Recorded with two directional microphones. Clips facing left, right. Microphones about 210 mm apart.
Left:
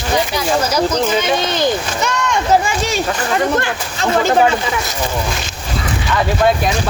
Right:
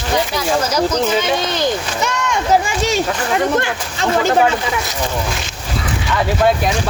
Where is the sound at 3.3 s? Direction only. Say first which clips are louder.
Even; 15° right (ahead or behind).